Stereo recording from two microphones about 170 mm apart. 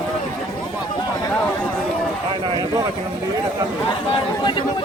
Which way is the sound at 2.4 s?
25° right (ahead or behind).